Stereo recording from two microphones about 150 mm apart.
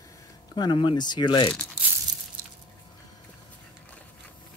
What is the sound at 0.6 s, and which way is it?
Speech, 30° left (ahead or behind).